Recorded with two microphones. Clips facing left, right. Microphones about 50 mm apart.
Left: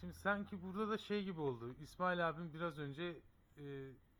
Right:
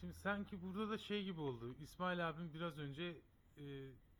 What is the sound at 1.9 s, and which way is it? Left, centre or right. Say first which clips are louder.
Speech: left 4 dB; left.